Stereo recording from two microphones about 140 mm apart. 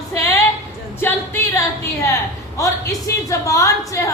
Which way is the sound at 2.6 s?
20° left (ahead or behind).